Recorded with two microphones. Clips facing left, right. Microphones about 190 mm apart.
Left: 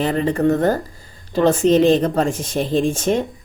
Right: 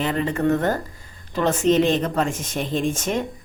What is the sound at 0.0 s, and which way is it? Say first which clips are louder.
Speech: left 4 dB; 35° left (ahead or behind).